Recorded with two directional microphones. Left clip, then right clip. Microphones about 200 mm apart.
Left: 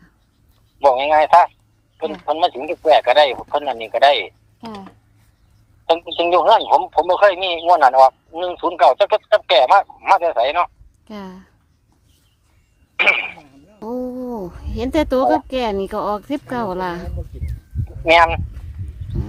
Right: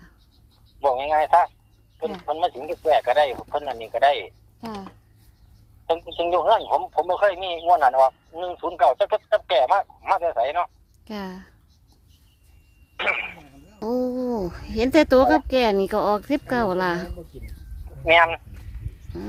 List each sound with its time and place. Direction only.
0.8 s speech: 30° left (ahead or behind)
4.6 s speech: centre (ahead or behind)
5.8 s speech: 35° left (ahead or behind)
11.0 s speech: 5° right (ahead or behind)
13.0 s a sound: 35° left (ahead or behind)
13.7 s speech: 10° right (ahead or behind)
18.0 s speech: 35° left (ahead or behind)